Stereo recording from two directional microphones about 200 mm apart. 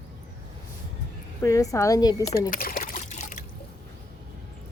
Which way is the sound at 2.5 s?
45° left (ahead or behind).